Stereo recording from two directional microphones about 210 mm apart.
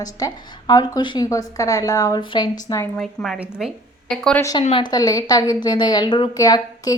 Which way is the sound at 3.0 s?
Centre (ahead or behind).